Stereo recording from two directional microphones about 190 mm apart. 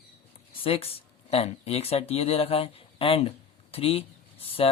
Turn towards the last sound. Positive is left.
turn(degrees=30)  # may be behind; listen again after turning